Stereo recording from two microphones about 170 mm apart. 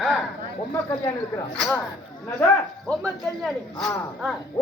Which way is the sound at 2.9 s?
5° left (ahead or behind).